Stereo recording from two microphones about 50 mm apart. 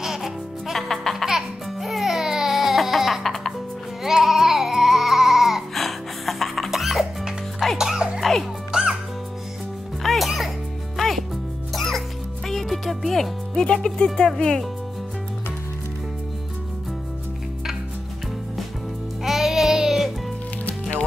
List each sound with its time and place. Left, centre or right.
0.0 s music: centre
0.7 s music: centre
1.2 s music: centre
4.0 s baby cry: centre
6.7 s music: centre
8.2 s music: centre
10.0 s music: centre
13.7 s music: centre
19.2 s music: centre